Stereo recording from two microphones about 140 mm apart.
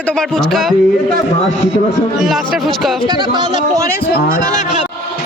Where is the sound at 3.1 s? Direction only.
30° right (ahead or behind).